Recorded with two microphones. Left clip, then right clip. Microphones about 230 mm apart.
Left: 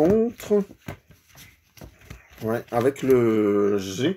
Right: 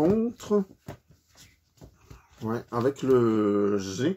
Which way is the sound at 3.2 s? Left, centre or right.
Centre.